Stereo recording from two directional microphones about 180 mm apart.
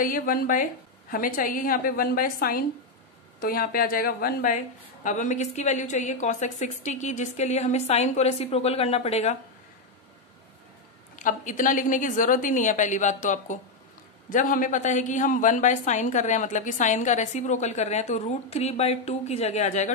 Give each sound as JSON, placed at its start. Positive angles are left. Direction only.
{"t": 0.0, "sound": "a woman's voice", "side_deg": 50}
{"t": 11.1, "sound": "a woman's voice", "side_deg": 45}